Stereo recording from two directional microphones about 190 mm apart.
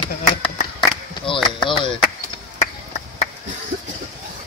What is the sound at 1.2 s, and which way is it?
Chop, 25° left (ahead or behind).